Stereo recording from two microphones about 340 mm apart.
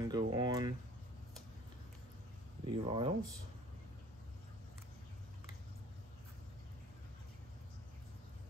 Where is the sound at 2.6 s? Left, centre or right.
Centre.